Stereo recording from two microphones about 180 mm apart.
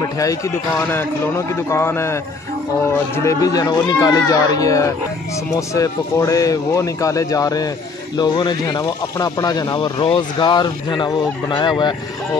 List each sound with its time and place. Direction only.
1.7 s a man's voice: 15° left (ahead or behind)
3.3 s speech: 20° left (ahead or behind)